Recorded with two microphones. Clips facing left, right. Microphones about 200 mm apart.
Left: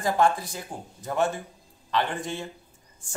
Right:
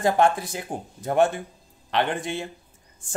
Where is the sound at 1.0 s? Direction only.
55° right (ahead or behind).